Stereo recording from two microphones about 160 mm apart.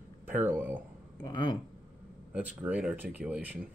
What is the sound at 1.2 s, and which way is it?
Speech, 30° left (ahead or behind).